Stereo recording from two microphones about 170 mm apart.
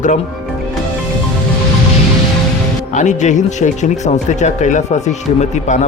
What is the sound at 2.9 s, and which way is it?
Speech, 45° left (ahead or behind).